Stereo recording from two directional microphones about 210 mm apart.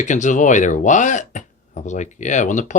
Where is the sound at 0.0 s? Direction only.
35° left (ahead or behind).